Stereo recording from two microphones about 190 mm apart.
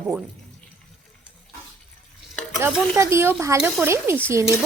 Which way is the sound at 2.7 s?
10° right (ahead or behind).